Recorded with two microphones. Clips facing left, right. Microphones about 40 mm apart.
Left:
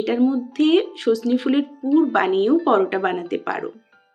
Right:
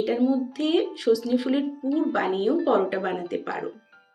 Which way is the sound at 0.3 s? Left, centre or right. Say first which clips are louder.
Left 6 dB; left.